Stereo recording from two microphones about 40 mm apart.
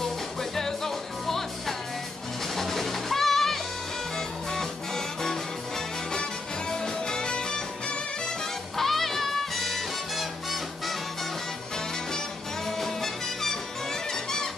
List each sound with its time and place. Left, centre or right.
0.0 s music: centre
8.7 s music: centre
12.6 s music: centre